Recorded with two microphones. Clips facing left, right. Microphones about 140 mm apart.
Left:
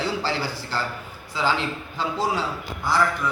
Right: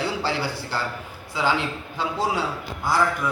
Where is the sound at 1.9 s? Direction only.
15° right (ahead or behind).